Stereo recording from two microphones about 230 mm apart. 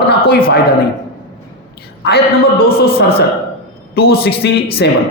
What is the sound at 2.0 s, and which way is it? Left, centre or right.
A man's voice, left.